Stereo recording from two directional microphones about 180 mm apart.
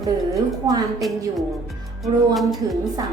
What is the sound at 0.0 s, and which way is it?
A woman's voice, 20° right (ahead or behind).